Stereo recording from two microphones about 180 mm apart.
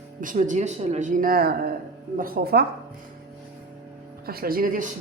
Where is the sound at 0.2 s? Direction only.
45° right (ahead or behind).